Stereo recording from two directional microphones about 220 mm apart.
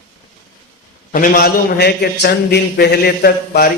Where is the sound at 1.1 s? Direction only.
40° left (ahead or behind).